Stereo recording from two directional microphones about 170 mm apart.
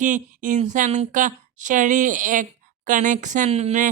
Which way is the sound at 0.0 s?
45° right (ahead or behind).